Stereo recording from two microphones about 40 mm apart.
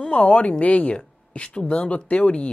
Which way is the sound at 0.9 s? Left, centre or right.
Left.